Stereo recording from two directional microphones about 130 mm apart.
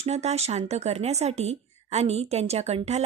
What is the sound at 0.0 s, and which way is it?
A woman's voice, 55° right (ahead or behind).